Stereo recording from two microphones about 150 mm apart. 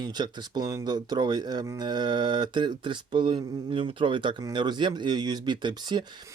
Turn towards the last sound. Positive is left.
turn(degrees=-30)  # may be behind; listen again after turning